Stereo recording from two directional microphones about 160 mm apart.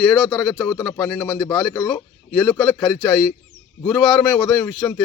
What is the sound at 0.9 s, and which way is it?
Speech, 20° left (ahead or behind).